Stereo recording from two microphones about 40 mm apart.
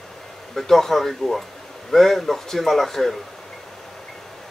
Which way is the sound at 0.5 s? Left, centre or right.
Centre.